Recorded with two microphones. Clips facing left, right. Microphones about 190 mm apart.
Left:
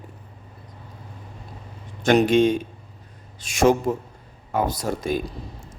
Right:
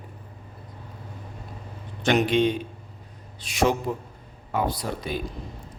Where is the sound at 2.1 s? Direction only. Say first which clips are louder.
Left 4 dB; 45° left (ahead or behind).